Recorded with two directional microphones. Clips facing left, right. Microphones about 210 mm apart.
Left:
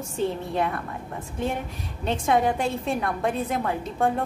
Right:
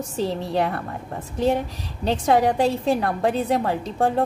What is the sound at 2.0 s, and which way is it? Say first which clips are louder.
A woman's voice: right 3 dB; 35° right (ahead or behind).